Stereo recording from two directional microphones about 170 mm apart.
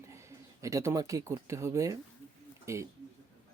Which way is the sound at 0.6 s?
20° right (ahead or behind).